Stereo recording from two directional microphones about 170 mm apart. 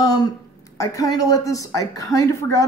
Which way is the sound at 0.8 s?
20° left (ahead or behind).